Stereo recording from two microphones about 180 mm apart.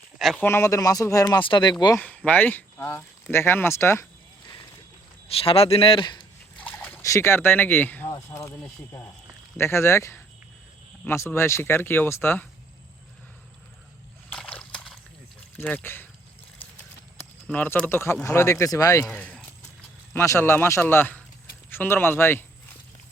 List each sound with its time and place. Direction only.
0.2 s speech: centre (ahead or behind)
0.4 s speech: 15° left (ahead or behind)
2.0 s speech: 10° left (ahead or behind)
5.4 s speech: 30° left (ahead or behind)
6.6 s speech: 10° left (ahead or behind)
14.3 s slosh: 5° left (ahead or behind)
15.5 s speech: 10° left (ahead or behind)
17.4 s speech: 10° left (ahead or behind)
19.0 s speech: 10° left (ahead or behind)